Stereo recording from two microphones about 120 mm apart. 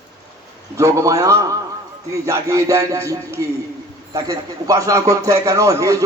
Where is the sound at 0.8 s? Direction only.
25° right (ahead or behind).